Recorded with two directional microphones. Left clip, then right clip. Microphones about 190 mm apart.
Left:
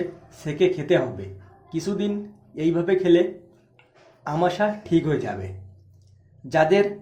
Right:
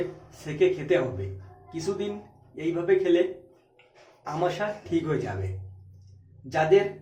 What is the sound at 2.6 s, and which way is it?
Speech, 25° left (ahead or behind).